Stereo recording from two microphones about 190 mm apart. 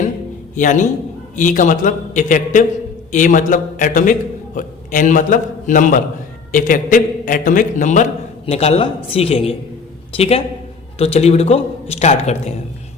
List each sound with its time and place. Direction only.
0.5 s a man's voice: 40° left (ahead or behind)